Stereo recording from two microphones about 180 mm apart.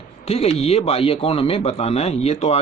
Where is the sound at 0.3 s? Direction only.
35° left (ahead or behind).